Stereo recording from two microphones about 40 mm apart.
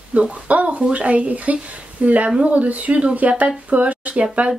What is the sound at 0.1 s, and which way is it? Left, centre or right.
Speech, right.